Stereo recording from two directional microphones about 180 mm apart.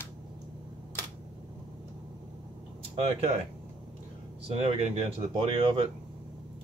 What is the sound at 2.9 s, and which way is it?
Speech, 35° right (ahead or behind).